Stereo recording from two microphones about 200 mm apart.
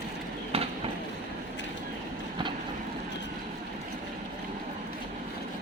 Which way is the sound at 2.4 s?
25° right (ahead or behind).